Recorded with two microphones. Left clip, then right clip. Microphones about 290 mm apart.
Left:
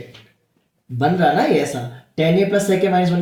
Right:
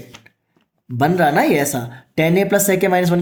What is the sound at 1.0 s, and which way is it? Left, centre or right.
Speech, right.